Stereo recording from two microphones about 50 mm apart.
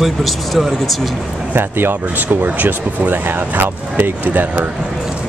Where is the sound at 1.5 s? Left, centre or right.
Right.